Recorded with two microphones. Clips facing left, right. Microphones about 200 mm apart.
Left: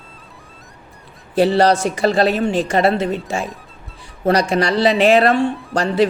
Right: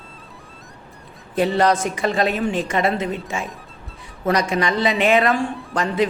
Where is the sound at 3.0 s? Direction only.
Centre (ahead or behind).